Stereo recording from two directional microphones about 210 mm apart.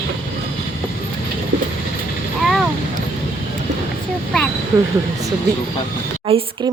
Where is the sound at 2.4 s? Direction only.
Centre (ahead or behind).